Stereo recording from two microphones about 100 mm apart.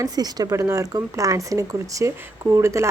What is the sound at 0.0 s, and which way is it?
A woman's voice, 40° right (ahead or behind).